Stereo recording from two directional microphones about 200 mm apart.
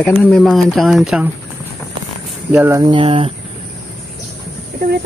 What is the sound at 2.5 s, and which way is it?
Speech, 10° right (ahead or behind).